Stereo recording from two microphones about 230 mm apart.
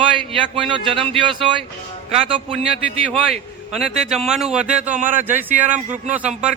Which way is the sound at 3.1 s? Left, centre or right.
Centre.